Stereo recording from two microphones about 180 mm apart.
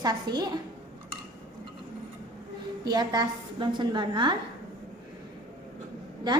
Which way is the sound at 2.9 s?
25° right (ahead or behind).